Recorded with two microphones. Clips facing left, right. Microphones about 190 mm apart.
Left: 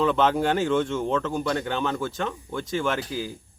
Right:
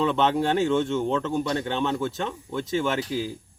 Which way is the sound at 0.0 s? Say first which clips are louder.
Left 1 dB; centre (ahead or behind).